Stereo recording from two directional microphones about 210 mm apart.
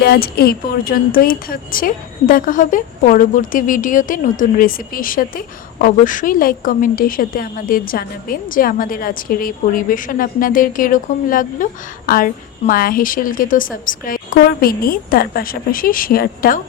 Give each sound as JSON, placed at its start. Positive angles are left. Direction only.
{"t": 0.0, "sound": "a woman's voice", "side_deg": 50}